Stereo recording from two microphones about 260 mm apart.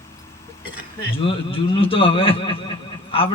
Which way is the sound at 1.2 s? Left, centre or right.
Left.